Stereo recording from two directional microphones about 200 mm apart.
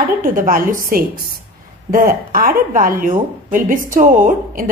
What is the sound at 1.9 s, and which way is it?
A woman's voice, 45° right (ahead or behind).